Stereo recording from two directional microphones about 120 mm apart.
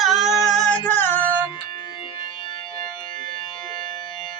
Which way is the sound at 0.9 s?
15° left (ahead or behind).